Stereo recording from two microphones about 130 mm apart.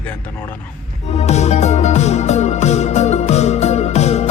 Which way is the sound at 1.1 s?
55° left (ahead or behind).